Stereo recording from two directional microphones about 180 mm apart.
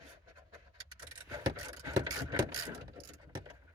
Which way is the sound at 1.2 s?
20° right (ahead or behind).